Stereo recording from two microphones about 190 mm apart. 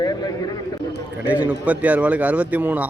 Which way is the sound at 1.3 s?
5° right (ahead or behind).